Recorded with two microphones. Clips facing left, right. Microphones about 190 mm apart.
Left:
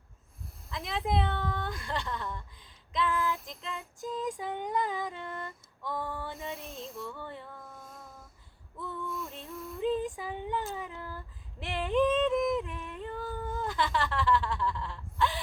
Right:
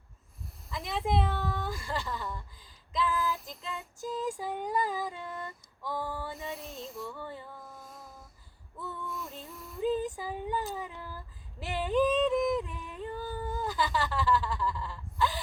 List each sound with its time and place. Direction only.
0.7 s a woman's voice: centre (ahead or behind)
8.8 s a sound: centre (ahead or behind)
11.6 s yodeling: 5° right (ahead or behind)